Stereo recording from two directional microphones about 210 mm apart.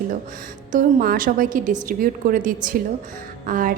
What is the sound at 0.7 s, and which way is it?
A woman's voice, 40° right (ahead or behind).